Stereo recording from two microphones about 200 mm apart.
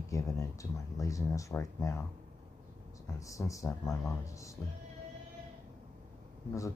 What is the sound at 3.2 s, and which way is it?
Speech, 15° left (ahead or behind).